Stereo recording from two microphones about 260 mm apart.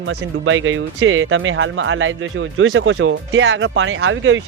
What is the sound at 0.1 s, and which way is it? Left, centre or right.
Speech, right.